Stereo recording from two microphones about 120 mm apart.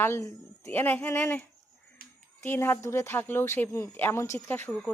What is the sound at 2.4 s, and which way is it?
Speech, 20° left (ahead or behind).